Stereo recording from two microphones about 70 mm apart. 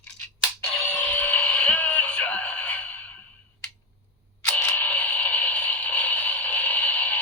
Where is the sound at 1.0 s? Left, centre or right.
Left.